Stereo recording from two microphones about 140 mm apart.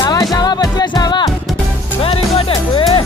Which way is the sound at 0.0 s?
30° left (ahead or behind).